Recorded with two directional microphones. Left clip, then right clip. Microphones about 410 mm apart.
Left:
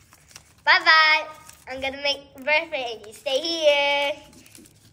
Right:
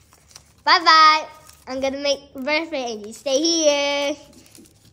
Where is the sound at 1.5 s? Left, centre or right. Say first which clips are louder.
Right 8 dB; centre.